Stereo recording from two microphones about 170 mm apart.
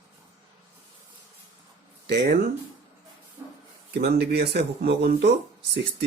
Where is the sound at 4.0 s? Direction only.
75° right (ahead or behind).